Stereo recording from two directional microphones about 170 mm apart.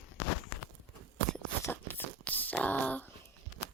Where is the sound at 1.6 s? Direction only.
10° left (ahead or behind).